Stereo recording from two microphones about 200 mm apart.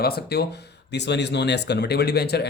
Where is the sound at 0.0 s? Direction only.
50° left (ahead or behind).